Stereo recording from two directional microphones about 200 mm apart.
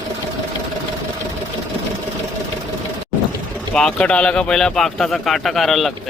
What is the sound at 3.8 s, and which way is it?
Speech, 5° left (ahead or behind).